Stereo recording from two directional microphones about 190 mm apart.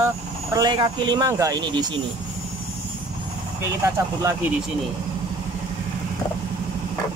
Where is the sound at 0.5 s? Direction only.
25° right (ahead or behind).